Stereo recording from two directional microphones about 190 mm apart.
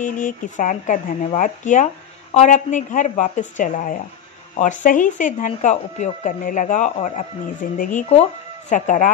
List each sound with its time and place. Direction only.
0.0 s speech: 45° left (ahead or behind)
8.1 s speech: 35° left (ahead or behind)